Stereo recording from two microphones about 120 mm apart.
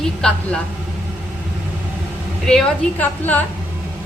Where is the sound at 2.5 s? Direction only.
5° left (ahead or behind).